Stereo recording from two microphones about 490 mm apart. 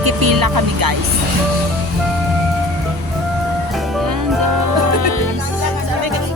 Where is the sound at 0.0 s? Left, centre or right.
Right.